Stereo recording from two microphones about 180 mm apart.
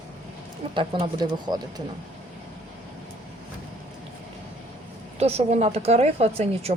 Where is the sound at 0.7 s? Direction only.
25° right (ahead or behind).